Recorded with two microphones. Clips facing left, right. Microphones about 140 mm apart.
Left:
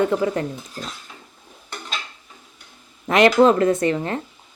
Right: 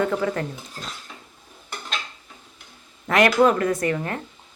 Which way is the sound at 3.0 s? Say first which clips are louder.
Left 3 dB; 20° left (ahead or behind).